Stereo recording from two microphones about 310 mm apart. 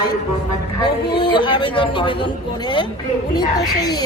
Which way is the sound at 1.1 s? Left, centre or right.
Centre.